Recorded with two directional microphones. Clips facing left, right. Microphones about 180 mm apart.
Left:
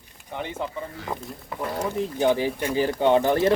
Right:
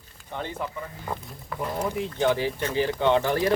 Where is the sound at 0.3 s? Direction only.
15° left (ahead or behind).